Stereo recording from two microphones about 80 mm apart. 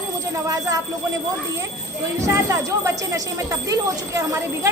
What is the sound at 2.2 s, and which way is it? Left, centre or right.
Speech, right.